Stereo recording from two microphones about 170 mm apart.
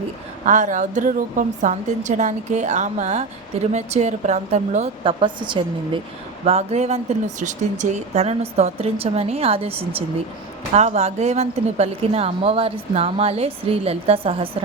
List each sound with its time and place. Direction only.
0.4 s a woman's voice: 45° right (ahead or behind)
5.2 s a woman's voice: 30° right (ahead or behind)